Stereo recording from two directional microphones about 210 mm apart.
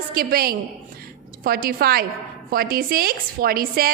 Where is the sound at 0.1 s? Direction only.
45° right (ahead or behind).